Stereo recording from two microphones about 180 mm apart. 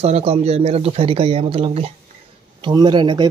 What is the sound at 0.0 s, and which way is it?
Speech, 35° right (ahead or behind).